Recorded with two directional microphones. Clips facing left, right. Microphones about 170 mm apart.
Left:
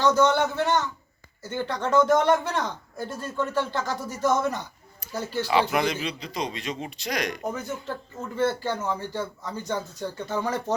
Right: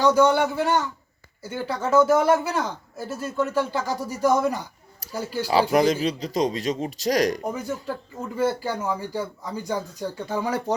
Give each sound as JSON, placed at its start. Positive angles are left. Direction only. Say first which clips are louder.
{"t": 0.0, "sound": "speech", "louder": "right 2 dB", "side_deg": -10}
{"t": 5.5, "sound": "speech", "louder": "right 5 dB", "side_deg": -35}
{"t": 7.4, "sound": "speech", "louder": "right 2 dB", "side_deg": -10}